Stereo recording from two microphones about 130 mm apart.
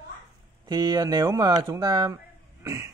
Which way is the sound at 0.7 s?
30° right (ahead or behind).